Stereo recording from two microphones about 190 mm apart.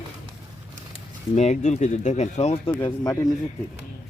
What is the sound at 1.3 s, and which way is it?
Speech, 40° left (ahead or behind).